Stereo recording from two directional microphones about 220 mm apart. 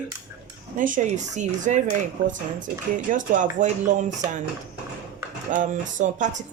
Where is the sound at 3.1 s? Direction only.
35° right (ahead or behind).